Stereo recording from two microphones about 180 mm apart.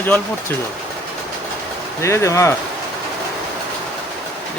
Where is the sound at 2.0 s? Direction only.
15° left (ahead or behind).